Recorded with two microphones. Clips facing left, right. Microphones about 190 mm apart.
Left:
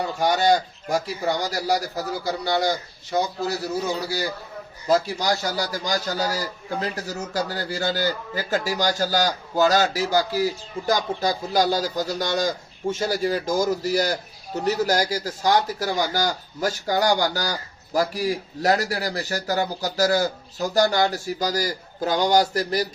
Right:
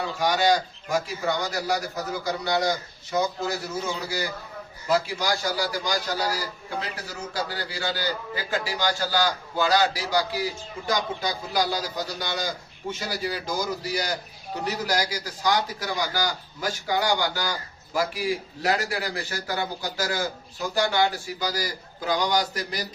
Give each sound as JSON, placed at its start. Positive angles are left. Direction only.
{"t": 0.9, "sound": "a man's voice", "side_deg": 35}